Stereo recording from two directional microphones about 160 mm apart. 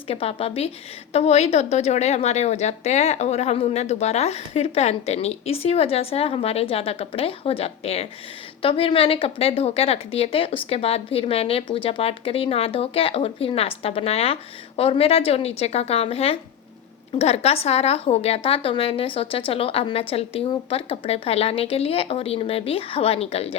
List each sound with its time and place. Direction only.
0.1 s a woman's voice: 40° left (ahead or behind)